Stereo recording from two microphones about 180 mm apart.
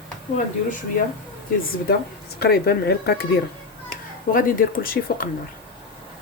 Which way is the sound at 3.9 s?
50° left (ahead or behind).